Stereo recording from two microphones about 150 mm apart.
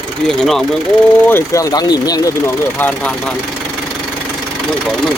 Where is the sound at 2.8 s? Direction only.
10° left (ahead or behind).